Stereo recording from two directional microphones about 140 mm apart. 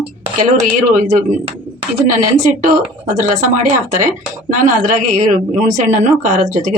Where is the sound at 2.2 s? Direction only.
65° right (ahead or behind).